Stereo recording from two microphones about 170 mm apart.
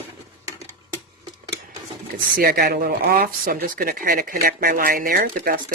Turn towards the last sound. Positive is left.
turn(degrees=-60)  # may be behind; listen again after turning